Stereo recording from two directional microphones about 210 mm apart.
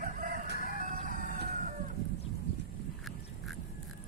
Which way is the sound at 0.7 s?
40° right (ahead or behind).